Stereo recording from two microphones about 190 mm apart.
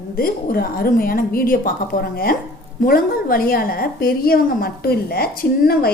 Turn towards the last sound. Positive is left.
turn(degrees=55)  # may be behind; listen again after turning